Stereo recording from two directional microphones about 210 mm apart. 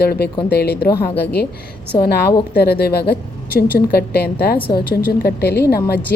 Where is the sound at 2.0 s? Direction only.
50° left (ahead or behind).